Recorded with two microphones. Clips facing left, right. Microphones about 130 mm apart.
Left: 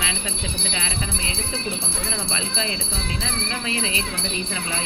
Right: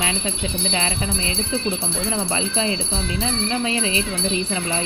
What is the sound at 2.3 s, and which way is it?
Jingle bell, 30° right (ahead or behind).